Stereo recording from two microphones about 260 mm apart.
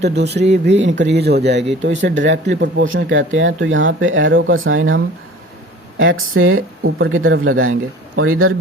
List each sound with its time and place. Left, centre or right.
0.0 s speech: right